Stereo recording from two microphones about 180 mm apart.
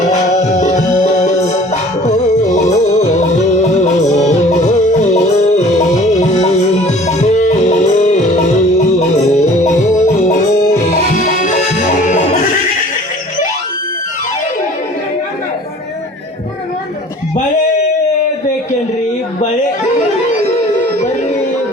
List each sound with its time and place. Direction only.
0.1 s music: 40° left (ahead or behind)
9.4 s music: 40° left (ahead or behind)